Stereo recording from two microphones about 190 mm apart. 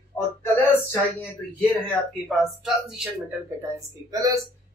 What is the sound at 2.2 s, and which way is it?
Speech, centre (ahead or behind).